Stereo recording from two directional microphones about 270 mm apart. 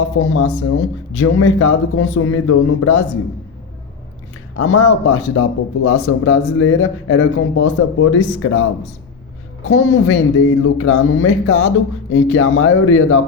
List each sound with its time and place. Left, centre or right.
0.2 s speech: left
4.5 s speech: left
9.6 s speech: left